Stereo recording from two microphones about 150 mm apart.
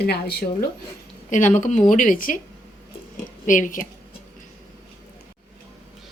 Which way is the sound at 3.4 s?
60° left (ahead or behind).